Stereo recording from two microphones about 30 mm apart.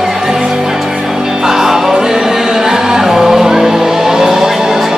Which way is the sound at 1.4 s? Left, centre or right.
Centre.